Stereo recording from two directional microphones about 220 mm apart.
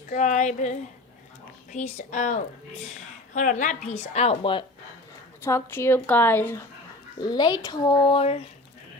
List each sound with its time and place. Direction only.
0.1 s speech: 35° left (ahead or behind)
1.7 s a woman's voice: 30° left (ahead or behind)
5.4 s a woman's voice: 10° left (ahead or behind)